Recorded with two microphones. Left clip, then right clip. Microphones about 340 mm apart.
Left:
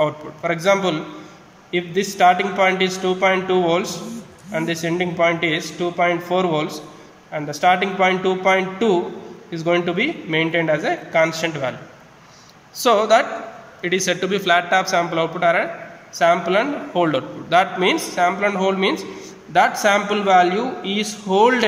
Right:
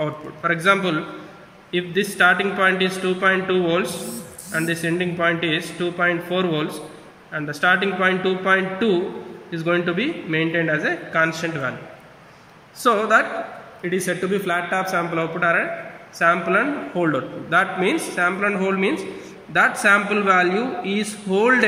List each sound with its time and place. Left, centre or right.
0.0 s a man's voice: left
12.7 s a man's voice: left